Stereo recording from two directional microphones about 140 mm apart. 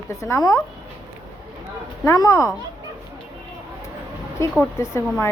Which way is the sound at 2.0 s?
20° left (ahead or behind).